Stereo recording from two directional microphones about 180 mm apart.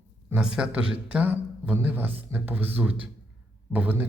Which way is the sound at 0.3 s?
5° right (ahead or behind).